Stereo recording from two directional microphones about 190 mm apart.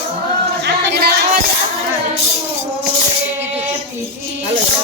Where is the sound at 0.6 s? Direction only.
60° right (ahead or behind).